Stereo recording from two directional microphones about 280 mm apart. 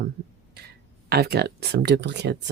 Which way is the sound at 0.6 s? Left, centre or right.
Right.